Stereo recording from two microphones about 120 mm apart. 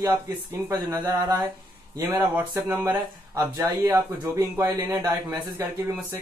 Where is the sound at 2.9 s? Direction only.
30° right (ahead or behind).